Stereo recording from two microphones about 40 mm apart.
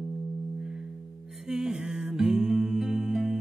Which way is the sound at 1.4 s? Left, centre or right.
Centre.